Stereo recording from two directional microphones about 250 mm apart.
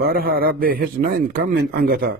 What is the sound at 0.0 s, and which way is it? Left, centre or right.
A man's voice, right.